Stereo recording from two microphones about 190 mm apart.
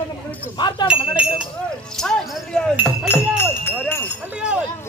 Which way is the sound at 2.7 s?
5° right (ahead or behind).